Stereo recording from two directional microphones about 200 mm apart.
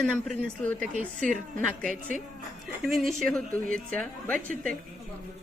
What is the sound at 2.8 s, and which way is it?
Speech, centre (ahead or behind).